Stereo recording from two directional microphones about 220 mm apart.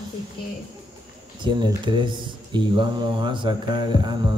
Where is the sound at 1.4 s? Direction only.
20° right (ahead or behind).